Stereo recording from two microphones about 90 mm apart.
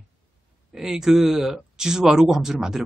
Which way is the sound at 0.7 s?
5° right (ahead or behind).